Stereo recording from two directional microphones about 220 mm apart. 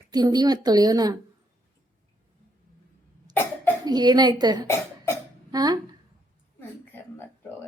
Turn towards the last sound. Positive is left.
turn(degrees=10)  # may be behind; listen again after turning